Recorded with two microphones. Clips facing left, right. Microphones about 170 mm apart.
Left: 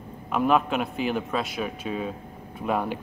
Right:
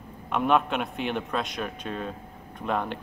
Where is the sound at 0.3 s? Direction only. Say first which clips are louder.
Left 1 dB; centre (ahead or behind).